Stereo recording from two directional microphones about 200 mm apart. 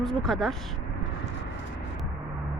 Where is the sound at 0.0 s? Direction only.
Centre (ahead or behind).